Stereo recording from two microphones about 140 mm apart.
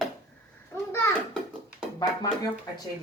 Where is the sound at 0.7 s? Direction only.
20° left (ahead or behind).